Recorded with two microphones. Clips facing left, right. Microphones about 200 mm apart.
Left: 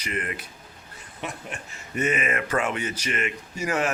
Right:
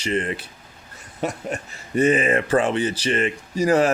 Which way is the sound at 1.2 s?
40° right (ahead or behind).